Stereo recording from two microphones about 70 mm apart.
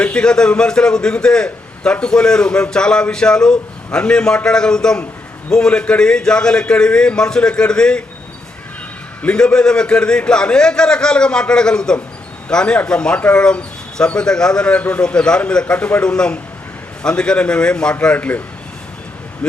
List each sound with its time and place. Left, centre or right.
0.0 s speech: centre
9.2 s speech: centre